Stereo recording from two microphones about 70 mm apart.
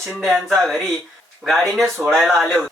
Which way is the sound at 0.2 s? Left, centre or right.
Centre.